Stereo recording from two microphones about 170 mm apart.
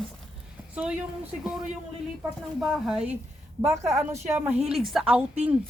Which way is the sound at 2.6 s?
5° right (ahead or behind).